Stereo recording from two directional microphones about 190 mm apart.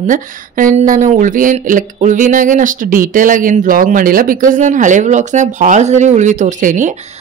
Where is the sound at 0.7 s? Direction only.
40° right (ahead or behind).